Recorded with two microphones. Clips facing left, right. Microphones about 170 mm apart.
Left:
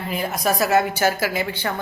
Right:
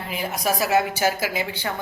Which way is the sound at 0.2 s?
10° right (ahead or behind).